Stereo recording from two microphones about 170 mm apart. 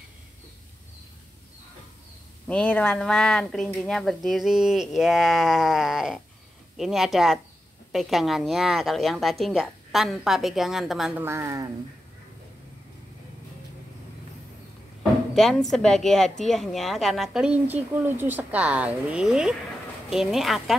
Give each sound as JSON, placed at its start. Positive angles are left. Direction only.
{"t": 2.4, "sound": "a woman's voice", "side_deg": 5}
{"t": 11.2, "sound": "speech", "side_deg": -15}
{"t": 15.3, "sound": "a woman's voice", "side_deg": 0}